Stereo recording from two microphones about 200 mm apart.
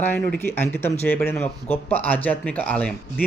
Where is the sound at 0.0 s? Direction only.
10° left (ahead or behind).